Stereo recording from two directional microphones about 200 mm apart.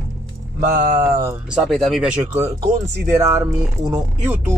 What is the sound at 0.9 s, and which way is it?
Speech, 15° right (ahead or behind).